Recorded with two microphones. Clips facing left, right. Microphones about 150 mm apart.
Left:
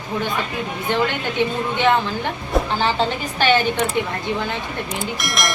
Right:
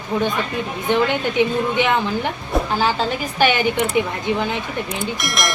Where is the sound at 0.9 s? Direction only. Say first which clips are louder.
Right 3 dB; 15° right (ahead or behind).